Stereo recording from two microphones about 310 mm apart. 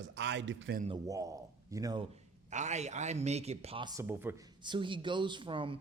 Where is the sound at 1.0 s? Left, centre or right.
Centre.